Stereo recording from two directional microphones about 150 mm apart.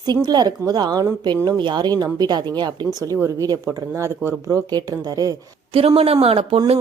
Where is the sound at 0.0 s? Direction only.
30° right (ahead or behind).